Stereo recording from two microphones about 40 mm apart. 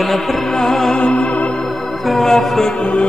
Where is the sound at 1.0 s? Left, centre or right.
Left.